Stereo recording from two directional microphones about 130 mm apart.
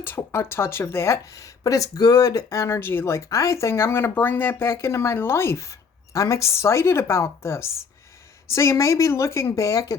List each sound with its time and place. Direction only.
0.0 s speech: 20° left (ahead or behind)